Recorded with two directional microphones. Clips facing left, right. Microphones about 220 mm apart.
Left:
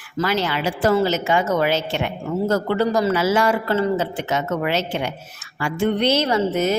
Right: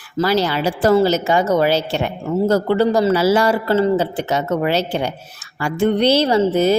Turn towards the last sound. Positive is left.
turn(degrees=-30)  # may be behind; listen again after turning